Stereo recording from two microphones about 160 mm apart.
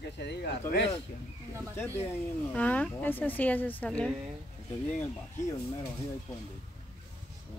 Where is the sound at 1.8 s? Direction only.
15° left (ahead or behind).